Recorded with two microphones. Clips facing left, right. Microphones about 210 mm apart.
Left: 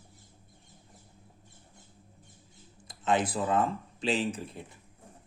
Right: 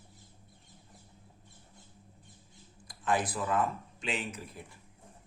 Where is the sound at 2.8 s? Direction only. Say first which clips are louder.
Left 3 dB; 25° left (ahead or behind).